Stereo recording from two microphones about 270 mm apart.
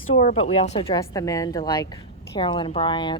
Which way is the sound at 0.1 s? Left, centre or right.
Left.